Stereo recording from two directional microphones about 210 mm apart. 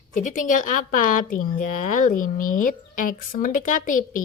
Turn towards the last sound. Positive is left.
turn(degrees=40)  # may be behind; listen again after turning